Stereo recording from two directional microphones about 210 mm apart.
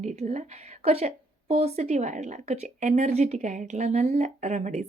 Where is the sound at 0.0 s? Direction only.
35° right (ahead or behind).